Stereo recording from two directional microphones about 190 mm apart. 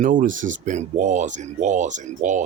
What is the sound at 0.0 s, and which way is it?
Speech, 45° right (ahead or behind).